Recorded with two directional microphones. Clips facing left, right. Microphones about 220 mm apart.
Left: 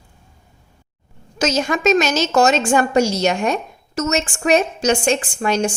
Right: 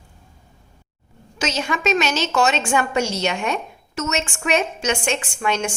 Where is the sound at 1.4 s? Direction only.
45° left (ahead or behind).